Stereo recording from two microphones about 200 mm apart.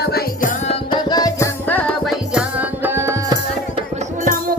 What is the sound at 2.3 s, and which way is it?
Music, 5° right (ahead or behind).